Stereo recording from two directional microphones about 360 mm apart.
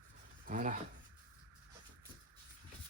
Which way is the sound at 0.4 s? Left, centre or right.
Right.